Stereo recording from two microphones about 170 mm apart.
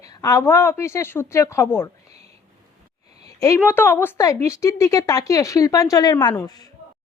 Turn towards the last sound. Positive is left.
turn(degrees=20)  # may be behind; listen again after turning